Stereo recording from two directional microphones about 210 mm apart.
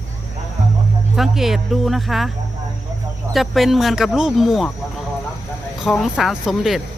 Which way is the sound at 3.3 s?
Centre (ahead or behind).